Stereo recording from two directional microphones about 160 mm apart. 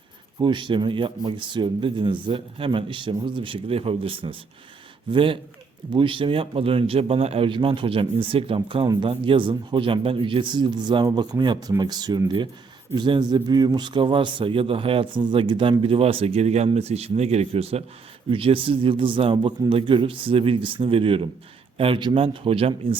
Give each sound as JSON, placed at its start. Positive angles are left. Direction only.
{"t": 0.3, "sound": "speech", "side_deg": -30}